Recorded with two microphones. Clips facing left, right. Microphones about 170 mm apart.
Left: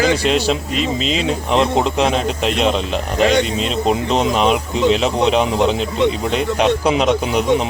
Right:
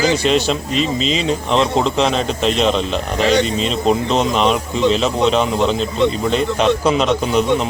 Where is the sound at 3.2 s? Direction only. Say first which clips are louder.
Left 1 dB; 55° left (ahead or behind).